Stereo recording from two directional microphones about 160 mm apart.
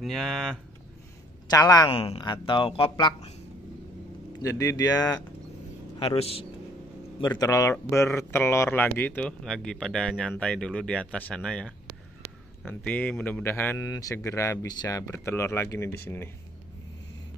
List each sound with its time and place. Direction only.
0.0 s speech: centre (ahead or behind)
1.7 s speech: 25° left (ahead or behind)
4.4 s speech: 20° left (ahead or behind)
5.9 s speech: 35° left (ahead or behind)
7.2 s speech: 25° left (ahead or behind)